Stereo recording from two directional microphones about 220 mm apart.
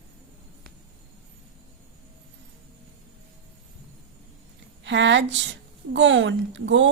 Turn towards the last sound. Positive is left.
turn(degrees=-55)  # may be behind; listen again after turning